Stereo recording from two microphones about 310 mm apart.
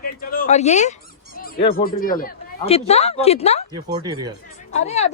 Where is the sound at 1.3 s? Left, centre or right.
Left.